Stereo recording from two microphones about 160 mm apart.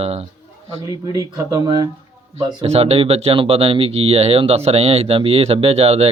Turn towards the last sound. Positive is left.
turn(degrees=-40)  # may be behind; listen again after turning